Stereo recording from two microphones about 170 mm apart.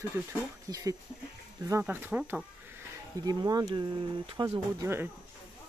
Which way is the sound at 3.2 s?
25° right (ahead or behind).